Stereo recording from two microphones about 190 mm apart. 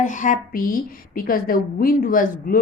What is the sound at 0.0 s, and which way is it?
A woman's voice, 40° left (ahead or behind).